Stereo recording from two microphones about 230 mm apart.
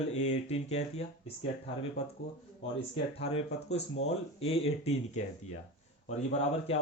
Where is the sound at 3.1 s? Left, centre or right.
Left.